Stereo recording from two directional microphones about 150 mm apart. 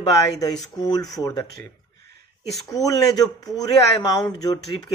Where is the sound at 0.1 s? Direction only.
25° left (ahead or behind).